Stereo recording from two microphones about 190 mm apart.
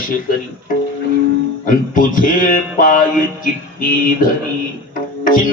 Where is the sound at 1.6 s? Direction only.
45° left (ahead or behind).